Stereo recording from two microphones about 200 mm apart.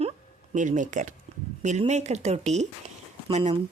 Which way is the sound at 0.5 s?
40° right (ahead or behind).